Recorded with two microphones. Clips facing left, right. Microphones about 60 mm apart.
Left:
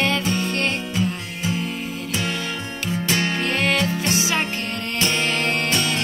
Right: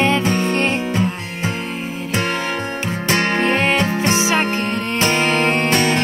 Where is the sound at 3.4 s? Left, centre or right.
Right.